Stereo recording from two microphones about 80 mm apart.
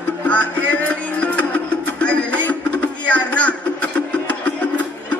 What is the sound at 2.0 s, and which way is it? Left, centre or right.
Music, centre.